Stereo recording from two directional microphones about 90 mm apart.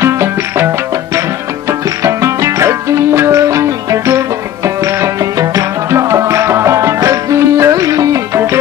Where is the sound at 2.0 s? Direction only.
35° right (ahead or behind).